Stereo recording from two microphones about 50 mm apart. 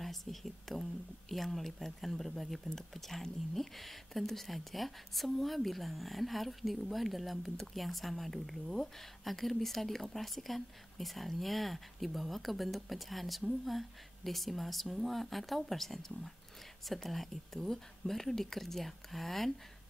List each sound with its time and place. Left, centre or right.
0.0 s speech: centre